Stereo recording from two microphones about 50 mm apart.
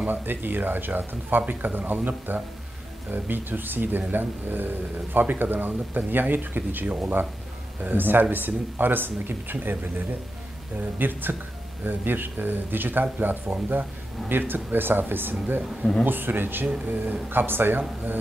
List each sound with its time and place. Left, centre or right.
0.0 s speech: right
11.0 s speech: right